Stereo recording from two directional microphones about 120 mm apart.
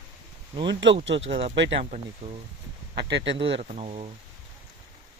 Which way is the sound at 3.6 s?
70° right (ahead or behind).